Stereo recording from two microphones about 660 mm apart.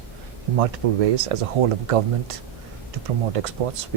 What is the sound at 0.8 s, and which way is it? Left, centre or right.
Speech, right.